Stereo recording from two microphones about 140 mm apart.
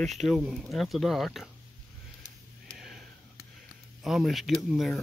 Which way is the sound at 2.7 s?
Centre (ahead or behind).